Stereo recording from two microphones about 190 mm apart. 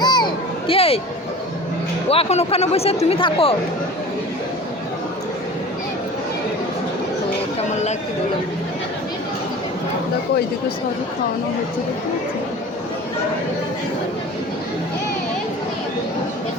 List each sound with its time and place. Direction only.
0.0 s a sound: 20° left (ahead or behind)
0.7 s speech: 30° left (ahead or behind)
2.0 s speech: 30° left (ahead or behind)